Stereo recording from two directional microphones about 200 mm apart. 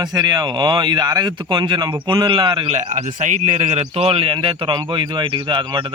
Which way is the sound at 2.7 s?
35° right (ahead or behind).